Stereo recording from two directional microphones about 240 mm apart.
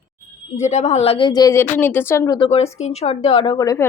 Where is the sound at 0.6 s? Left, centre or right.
Left.